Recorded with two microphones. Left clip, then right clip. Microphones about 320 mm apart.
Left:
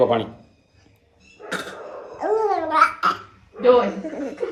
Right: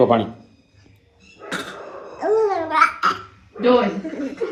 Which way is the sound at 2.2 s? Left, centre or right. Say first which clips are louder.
Right 2 dB; centre.